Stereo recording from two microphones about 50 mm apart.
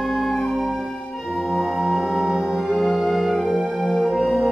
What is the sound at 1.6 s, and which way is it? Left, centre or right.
Music, centre.